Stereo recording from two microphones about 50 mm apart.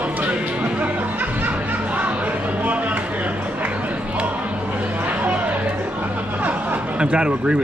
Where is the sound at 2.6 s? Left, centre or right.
Right.